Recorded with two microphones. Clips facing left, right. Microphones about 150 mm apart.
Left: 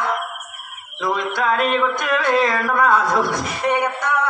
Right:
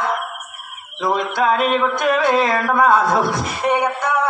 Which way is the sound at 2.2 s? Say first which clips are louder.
Right 2 dB; 5° right (ahead or behind).